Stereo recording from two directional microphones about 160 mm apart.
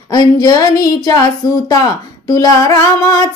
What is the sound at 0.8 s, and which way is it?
Speech, 25° left (ahead or behind).